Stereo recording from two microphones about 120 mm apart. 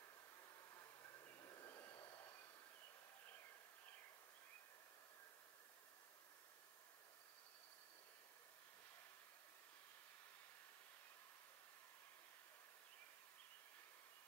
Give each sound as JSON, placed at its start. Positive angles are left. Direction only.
{"t": 1.4, "sound": "train", "side_deg": 30}